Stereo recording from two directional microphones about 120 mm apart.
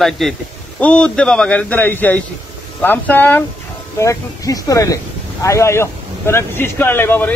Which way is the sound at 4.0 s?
25° left (ahead or behind).